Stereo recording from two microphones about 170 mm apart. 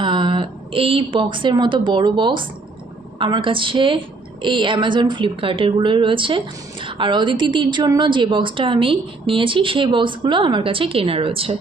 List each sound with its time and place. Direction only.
0.0 s a woman's voice: 30° right (ahead or behind)